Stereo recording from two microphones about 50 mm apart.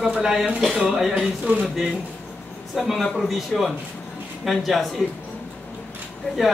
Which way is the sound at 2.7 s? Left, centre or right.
Centre.